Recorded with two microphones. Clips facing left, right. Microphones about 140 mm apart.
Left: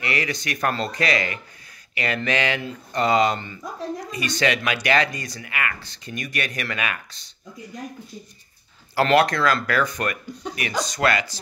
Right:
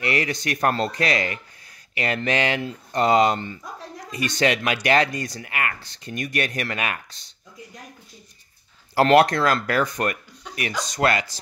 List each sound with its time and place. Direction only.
0.0 s speech: 45° right (ahead or behind)
8.9 s speech: 45° right (ahead or behind)